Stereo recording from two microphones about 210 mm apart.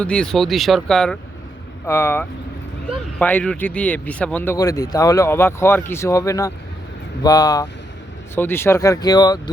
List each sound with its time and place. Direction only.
0.0 s speech: 5° left (ahead or behind)